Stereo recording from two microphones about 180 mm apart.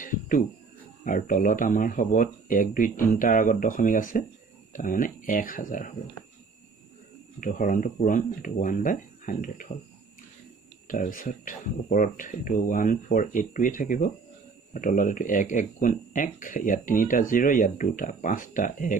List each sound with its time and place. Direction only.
0.0 s a sound: 50° left (ahead or behind)
1.0 s speech: 50° left (ahead or behind)
7.3 s speech: 45° left (ahead or behind)
10.9 s speech: 50° left (ahead or behind)